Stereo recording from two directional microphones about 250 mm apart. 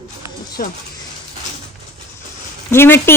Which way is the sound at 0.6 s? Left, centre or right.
Left.